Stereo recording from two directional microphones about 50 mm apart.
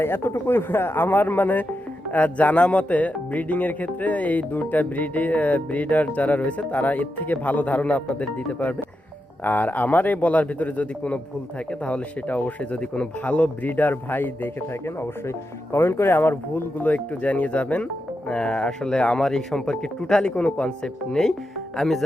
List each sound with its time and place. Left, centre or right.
0.0 s a man's voice: left
14.7 s speech: left; by 20.3 s centre
20.3 s a man's voice: left
20.7 s speech: centre